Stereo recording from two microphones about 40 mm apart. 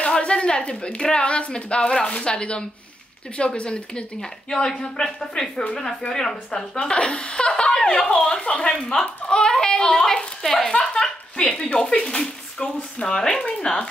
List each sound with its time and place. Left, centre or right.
0.2 s a woman's voice: left
4.5 s speech: centre
10.7 s a sound: centre
12.1 s speech: centre